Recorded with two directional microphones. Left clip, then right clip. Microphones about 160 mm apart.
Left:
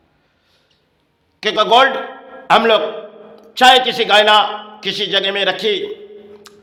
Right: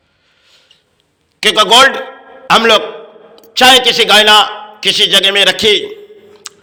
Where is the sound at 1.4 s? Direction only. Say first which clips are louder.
Right 5 dB; 15° right (ahead or behind).